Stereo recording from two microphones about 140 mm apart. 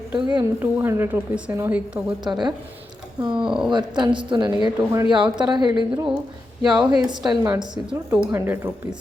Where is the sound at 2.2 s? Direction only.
30° right (ahead or behind).